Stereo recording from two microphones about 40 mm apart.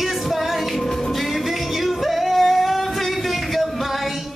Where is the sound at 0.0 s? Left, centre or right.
Centre.